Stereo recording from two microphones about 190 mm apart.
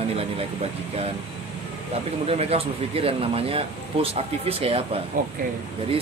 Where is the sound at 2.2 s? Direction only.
30° right (ahead or behind).